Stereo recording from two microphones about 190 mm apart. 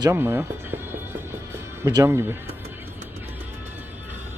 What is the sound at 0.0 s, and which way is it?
Music, 15° right (ahead or behind).